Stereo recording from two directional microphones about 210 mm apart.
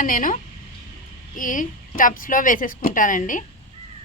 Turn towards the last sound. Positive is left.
turn(degrees=40)  # may be behind; listen again after turning